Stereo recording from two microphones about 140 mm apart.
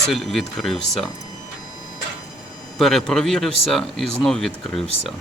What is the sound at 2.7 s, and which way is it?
Speech, centre (ahead or behind).